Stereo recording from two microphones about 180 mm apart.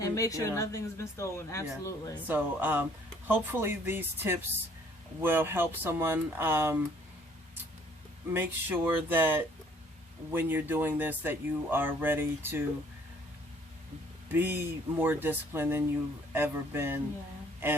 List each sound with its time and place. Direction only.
0.0 s a woman's voice: 20° left (ahead or behind)
2.2 s speech: 10° right (ahead or behind)
8.3 s speech: 10° right (ahead or behind)
14.3 s speech: 10° right (ahead or behind)